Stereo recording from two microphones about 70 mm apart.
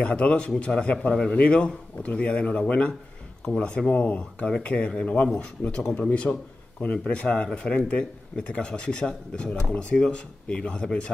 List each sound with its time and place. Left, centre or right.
0.0 s speech: centre